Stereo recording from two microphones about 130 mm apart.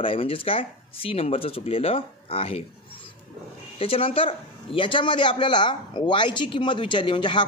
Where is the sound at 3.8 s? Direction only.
45° left (ahead or behind).